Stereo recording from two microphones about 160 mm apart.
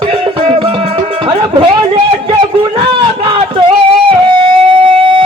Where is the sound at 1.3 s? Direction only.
30° right (ahead or behind).